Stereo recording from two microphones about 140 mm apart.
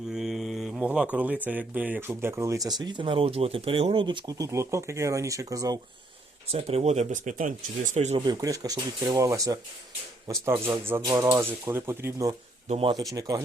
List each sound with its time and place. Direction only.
0.1 s speech: 5° right (ahead or behind); by 2.7 s 25° right (ahead or behind)
2.8 s speech: 35° right (ahead or behind)
6.5 s speech: 45° right (ahead or behind)
8.2 s speech: 25° right (ahead or behind)
12.6 s speech: 50° right (ahead or behind)
13.1 s speech: 25° right (ahead or behind)